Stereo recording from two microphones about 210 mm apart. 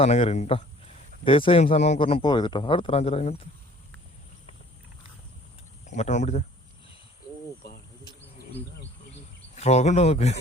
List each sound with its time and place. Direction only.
0.0 s speech: 30° left (ahead or behind)
5.9 s speech: 35° left (ahead or behind)
9.6 s speech: 30° left (ahead or behind)